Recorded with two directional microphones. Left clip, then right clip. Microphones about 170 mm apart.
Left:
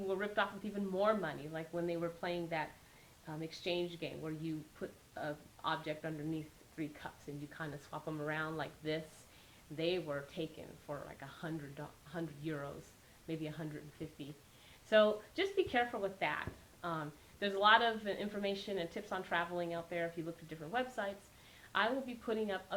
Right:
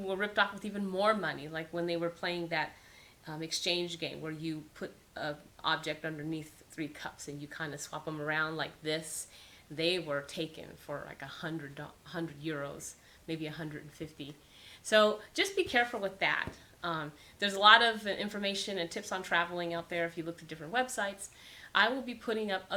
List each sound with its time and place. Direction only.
0.1 s speech: 20° right (ahead or behind)